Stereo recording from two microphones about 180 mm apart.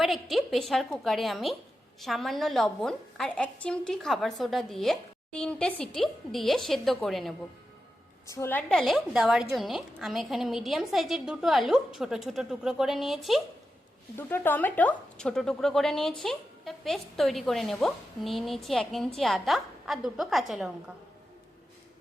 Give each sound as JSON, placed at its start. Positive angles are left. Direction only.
{"t": 0.0, "sound": "a woman's voice", "side_deg": 0}
{"t": 8.3, "sound": "a woman's voice", "side_deg": 15}
{"t": 8.8, "sound": "a woman's voice", "side_deg": 0}
{"t": 14.2, "sound": "a woman's voice", "side_deg": 10}